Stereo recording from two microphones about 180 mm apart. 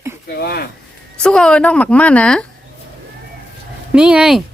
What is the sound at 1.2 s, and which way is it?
A woman's voice, 5° left (ahead or behind).